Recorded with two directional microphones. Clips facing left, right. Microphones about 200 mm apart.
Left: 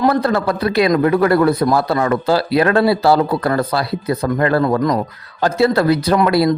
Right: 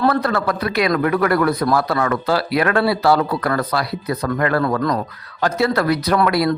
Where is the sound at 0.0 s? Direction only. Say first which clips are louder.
Left 3 dB; 25° left (ahead or behind).